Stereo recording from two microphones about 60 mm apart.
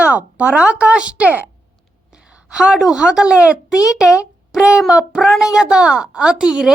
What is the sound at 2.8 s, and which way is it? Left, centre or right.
A woman's voice, centre.